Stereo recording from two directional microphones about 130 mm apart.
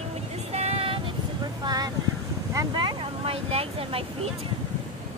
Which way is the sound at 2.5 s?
25° right (ahead or behind).